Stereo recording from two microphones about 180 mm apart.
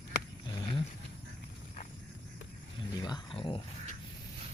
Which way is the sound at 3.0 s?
25° left (ahead or behind).